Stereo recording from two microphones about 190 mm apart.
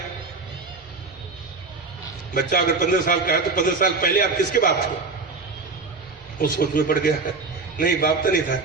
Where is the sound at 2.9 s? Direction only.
45° left (ahead or behind).